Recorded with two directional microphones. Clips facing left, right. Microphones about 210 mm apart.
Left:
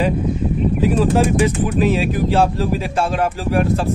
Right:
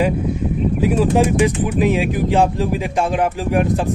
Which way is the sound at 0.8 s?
10° right (ahead or behind).